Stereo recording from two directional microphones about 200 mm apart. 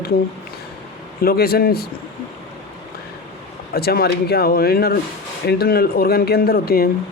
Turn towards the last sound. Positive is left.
turn(degrees=50)  # may be behind; listen again after turning